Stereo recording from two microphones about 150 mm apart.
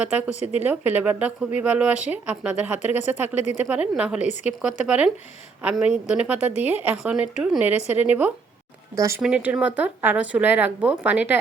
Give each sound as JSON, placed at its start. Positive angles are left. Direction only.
{"t": 0.0, "sound": "speech", "side_deg": -10}
{"t": 9.2, "sound": "speech", "side_deg": -10}